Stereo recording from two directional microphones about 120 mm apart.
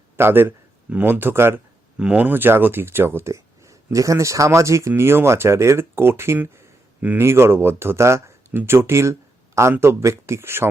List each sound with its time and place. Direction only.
0.2 s speech: 20° right (ahead or behind)